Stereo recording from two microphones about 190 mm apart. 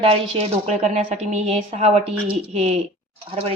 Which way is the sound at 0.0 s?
30° right (ahead or behind).